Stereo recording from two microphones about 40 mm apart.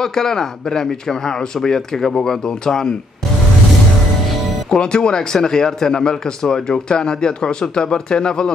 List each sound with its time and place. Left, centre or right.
0.0 s a man's voice: centre
4.6 s speech: left